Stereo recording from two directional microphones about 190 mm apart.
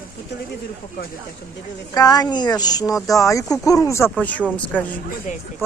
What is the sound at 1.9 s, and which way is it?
A woman's voice, 20° left (ahead or behind).